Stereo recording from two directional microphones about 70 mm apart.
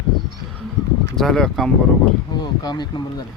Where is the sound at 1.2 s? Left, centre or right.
Centre.